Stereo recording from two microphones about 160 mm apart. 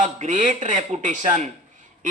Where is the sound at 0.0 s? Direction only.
50° right (ahead or behind).